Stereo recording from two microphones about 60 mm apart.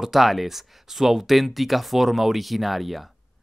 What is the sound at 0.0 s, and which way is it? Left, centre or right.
Speech, centre.